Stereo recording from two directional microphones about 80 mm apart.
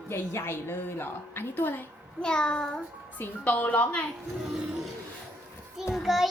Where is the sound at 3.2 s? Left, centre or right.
Left.